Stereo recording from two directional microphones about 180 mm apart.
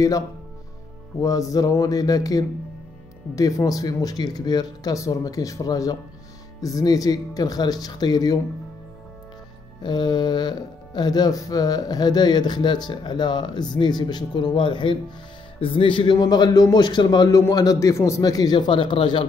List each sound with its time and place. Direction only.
1.2 s speech: 20° left (ahead or behind)
9.8 s speech: 25° left (ahead or behind)